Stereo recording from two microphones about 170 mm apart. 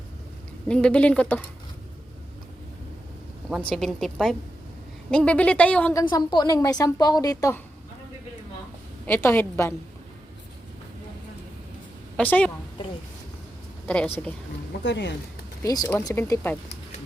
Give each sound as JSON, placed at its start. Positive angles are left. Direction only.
{"t": 0.7, "sound": "speech", "side_deg": 5}
{"t": 3.6, "sound": "a woman's voice", "side_deg": 5}
{"t": 5.9, "sound": "a woman's voice", "side_deg": 20}
{"t": 9.0, "sound": "a woman's voice", "side_deg": 15}
{"t": 12.1, "sound": "a woman's voice", "side_deg": 10}
{"t": 13.8, "sound": "speech", "side_deg": 5}
{"t": 14.8, "sound": "speech", "side_deg": 90}
{"t": 15.6, "sound": "a woman's voice", "side_deg": 20}